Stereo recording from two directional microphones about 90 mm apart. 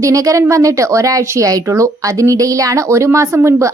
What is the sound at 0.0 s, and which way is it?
Speech, 40° right (ahead or behind).